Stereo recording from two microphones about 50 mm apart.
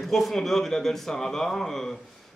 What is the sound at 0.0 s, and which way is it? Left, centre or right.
A man's voice, centre.